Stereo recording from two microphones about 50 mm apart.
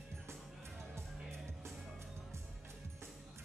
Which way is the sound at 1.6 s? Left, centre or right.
Right.